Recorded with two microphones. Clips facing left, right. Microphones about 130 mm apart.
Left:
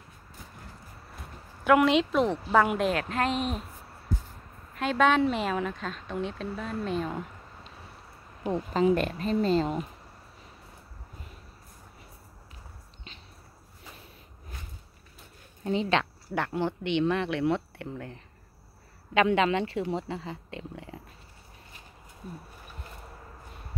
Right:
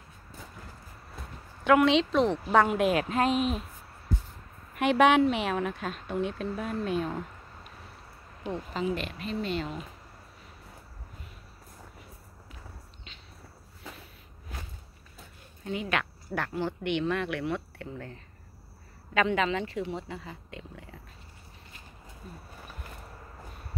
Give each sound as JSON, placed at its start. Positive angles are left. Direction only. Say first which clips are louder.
{"t": 1.6, "sound": "a woman's voice", "louder": "even", "side_deg": 5}
{"t": 2.8, "sound": "speech", "louder": "right 2 dB", "side_deg": -15}
{"t": 4.7, "sound": "speech", "louder": "right 2 dB", "side_deg": -15}
{"t": 5.2, "sound": "speech", "louder": "right 1 dB", "side_deg": 0}
{"t": 8.5, "sound": "speech", "louder": "left 7 dB", "side_deg": 35}
{"t": 15.6, "sound": "speech", "louder": "left 5 dB", "side_deg": 30}
{"t": 17.9, "sound": "a woman's voice", "louder": "even", "side_deg": 15}
{"t": 19.3, "sound": "speech", "louder": "left 3 dB", "side_deg": 30}